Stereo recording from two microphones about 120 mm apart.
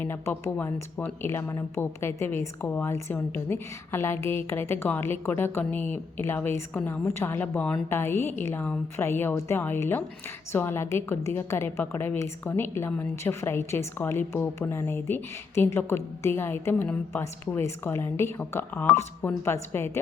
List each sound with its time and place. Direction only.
0.0 s a woman's voice: 20° left (ahead or behind)